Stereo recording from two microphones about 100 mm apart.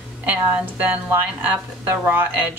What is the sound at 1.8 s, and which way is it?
Speech, 20° right (ahead or behind).